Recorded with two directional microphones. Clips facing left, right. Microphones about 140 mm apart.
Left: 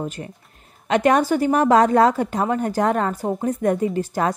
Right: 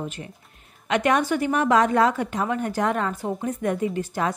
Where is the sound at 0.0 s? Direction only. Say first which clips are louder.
Left 4 dB; 40° left (ahead or behind).